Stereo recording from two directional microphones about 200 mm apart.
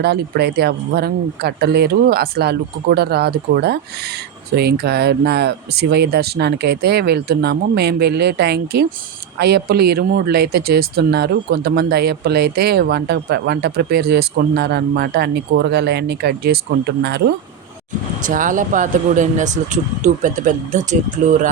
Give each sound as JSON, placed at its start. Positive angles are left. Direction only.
{"t": 0.0, "sound": "speech", "side_deg": -55}
{"t": 18.2, "sound": "speech", "side_deg": -40}